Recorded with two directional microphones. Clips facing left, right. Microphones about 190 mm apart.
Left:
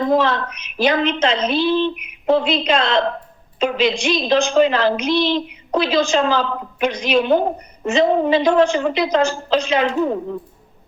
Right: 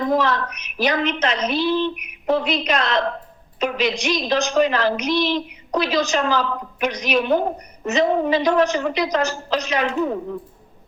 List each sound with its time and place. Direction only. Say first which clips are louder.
0.0 s a woman's voice: left 3 dB; 25° left (ahead or behind)